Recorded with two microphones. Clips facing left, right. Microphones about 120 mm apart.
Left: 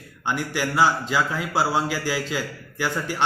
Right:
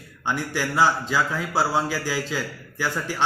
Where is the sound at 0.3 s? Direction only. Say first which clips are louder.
Left 1 dB; 10° left (ahead or behind).